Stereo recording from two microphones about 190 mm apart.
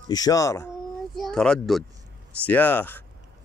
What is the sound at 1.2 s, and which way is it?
A child's voice, 5° left (ahead or behind).